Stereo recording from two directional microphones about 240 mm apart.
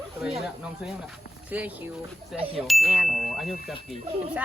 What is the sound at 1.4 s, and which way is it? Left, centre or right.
Speech, centre.